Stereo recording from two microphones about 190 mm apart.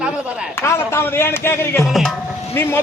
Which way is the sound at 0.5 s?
15° left (ahead or behind).